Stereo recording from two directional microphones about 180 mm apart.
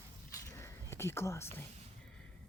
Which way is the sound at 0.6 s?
15° left (ahead or behind).